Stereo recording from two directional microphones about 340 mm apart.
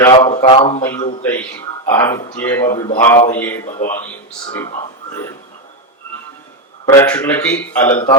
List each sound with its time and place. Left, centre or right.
0.0 s a man's voice: centre
3.7 s speech: left
6.8 s a man's voice: centre